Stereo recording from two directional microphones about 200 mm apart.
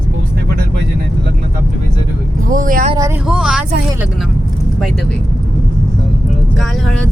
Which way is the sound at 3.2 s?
5° right (ahead or behind).